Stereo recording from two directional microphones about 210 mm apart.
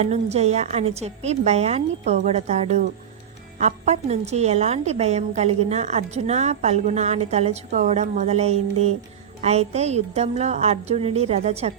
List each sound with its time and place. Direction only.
0.0 s a woman's voice: 30° right (ahead or behind)